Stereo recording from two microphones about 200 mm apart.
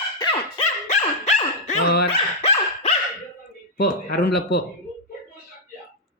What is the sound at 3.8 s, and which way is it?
Speech, 55° left (ahead or behind).